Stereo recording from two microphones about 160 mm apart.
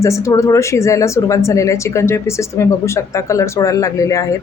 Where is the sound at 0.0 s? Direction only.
20° left (ahead or behind).